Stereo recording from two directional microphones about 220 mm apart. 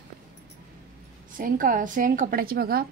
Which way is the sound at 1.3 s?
40° right (ahead or behind).